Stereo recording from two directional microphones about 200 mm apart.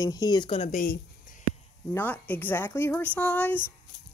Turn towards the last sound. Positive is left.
turn(degrees=10)  # may be behind; listen again after turning